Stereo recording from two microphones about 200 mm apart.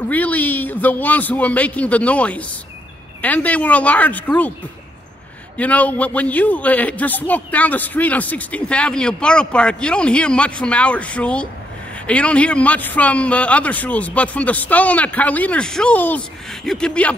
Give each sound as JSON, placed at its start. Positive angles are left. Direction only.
{"t": 0.1, "sound": "a man's voice", "side_deg": 10}
{"t": 5.6, "sound": "a man's voice", "side_deg": 5}